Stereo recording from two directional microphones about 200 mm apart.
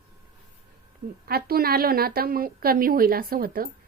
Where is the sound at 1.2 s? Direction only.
50° right (ahead or behind).